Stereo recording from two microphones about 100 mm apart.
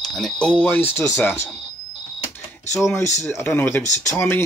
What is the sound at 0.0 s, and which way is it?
Speech, 5° left (ahead or behind).